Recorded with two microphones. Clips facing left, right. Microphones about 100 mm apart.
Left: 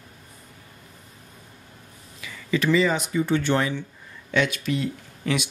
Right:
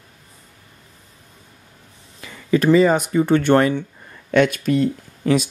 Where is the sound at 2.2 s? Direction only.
45° right (ahead or behind).